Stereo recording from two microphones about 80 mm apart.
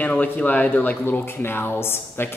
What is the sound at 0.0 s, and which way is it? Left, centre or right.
Speech, centre.